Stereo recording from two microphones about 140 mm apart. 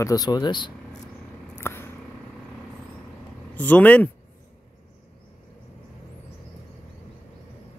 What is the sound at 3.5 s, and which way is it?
Speech, 10° left (ahead or behind).